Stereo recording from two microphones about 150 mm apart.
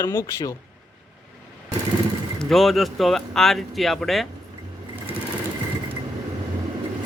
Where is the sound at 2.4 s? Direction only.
Centre (ahead or behind).